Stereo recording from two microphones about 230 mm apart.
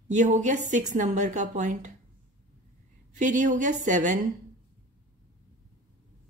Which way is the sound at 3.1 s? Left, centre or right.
Right.